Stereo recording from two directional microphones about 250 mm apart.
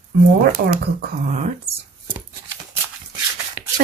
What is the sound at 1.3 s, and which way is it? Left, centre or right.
Speech, right.